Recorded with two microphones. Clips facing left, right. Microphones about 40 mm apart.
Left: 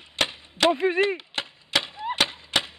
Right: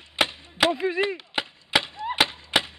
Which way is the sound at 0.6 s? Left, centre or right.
Centre.